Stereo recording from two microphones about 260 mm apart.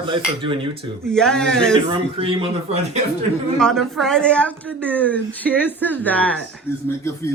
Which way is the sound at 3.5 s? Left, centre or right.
Centre.